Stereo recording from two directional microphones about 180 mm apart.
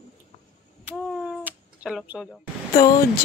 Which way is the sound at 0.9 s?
Centre (ahead or behind).